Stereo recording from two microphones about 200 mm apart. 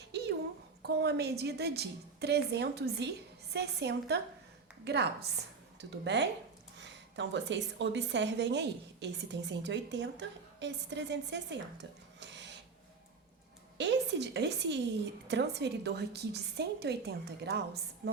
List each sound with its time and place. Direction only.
0.1 s a sound: 55° right (ahead or behind)
0.8 s a woman's voice: 55° right (ahead or behind)
13.7 s a woman's voice: 60° right (ahead or behind)